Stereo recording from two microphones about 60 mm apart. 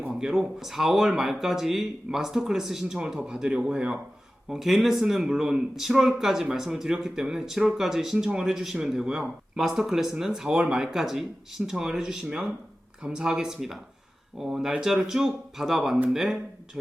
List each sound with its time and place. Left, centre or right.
0.1 s a man's voice: centre